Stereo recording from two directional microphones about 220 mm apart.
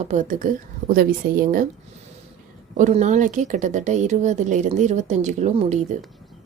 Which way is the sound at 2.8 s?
35° right (ahead or behind).